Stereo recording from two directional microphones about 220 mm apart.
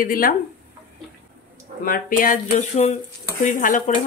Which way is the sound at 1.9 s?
40° left (ahead or behind).